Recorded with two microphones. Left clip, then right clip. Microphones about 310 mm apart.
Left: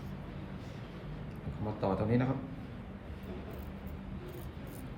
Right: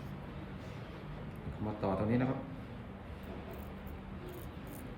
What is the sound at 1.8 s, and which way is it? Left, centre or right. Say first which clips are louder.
Speech: left 2 dB; centre.